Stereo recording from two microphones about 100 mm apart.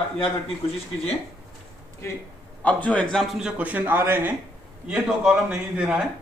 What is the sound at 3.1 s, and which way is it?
Speech, 5° right (ahead or behind).